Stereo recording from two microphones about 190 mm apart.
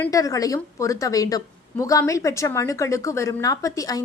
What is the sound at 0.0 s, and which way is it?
A woman's voice, 20° left (ahead or behind).